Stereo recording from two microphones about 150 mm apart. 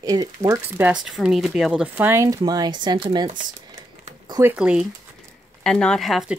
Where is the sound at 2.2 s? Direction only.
25° right (ahead or behind).